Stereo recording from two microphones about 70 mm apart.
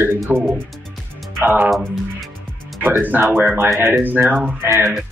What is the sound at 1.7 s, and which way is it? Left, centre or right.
Speech, centre.